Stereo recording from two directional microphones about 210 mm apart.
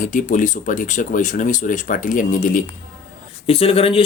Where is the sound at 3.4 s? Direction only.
25° left (ahead or behind).